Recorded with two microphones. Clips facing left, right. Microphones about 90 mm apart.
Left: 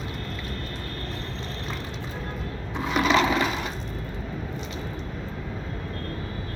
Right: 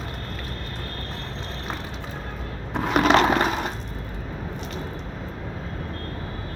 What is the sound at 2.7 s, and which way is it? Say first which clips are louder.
Crushing: right 4 dB; 55° right (ahead or behind).